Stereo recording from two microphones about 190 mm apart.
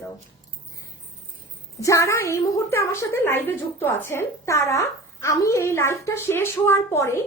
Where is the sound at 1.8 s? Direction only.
15° left (ahead or behind).